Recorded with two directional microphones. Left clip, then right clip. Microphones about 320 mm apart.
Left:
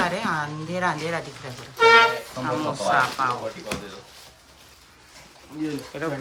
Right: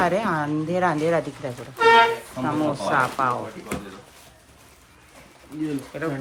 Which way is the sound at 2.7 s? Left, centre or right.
Centre.